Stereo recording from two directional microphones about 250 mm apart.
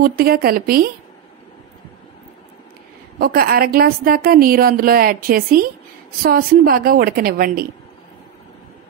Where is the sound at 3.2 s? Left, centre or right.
Right.